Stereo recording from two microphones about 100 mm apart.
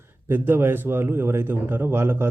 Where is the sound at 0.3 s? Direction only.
20° right (ahead or behind).